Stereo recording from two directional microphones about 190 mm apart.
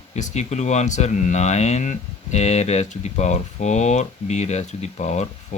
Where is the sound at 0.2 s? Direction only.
40° left (ahead or behind).